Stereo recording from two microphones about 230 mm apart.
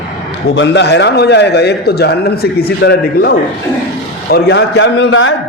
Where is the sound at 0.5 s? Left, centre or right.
Left.